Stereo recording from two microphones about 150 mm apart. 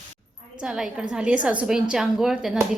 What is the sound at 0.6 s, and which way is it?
A woman's voice, 5° right (ahead or behind).